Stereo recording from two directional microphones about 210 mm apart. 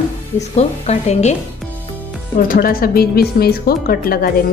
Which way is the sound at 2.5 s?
45° left (ahead or behind).